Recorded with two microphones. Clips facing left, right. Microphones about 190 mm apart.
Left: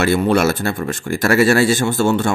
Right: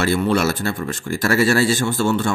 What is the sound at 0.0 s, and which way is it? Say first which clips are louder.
Speech: left 3 dB; 50° left (ahead or behind).